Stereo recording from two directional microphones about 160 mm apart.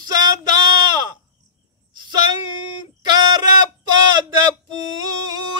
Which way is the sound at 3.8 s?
25° right (ahead or behind).